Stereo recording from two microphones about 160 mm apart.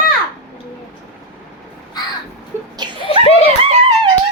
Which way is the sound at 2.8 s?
25° right (ahead or behind).